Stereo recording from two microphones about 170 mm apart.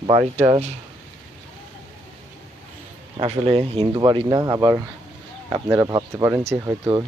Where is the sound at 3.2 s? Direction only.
35° right (ahead or behind); by 7.0 s 15° right (ahead or behind).